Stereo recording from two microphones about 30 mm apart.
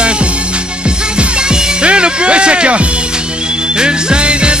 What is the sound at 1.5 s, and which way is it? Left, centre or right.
Music, right.